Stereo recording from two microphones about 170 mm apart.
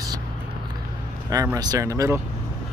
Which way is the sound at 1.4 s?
20° right (ahead or behind).